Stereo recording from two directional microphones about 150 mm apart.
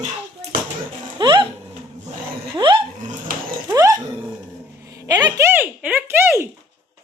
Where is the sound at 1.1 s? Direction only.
30° right (ahead or behind).